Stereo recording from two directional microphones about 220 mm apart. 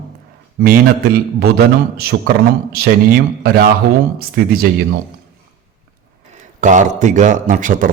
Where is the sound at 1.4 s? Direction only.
45° right (ahead or behind).